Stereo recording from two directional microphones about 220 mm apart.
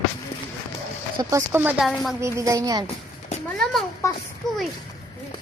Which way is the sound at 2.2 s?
15° right (ahead or behind).